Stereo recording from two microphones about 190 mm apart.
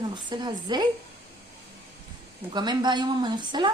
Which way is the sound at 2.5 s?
25° right (ahead or behind).